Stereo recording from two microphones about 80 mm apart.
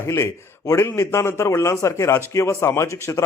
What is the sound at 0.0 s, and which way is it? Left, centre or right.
A man's voice, left.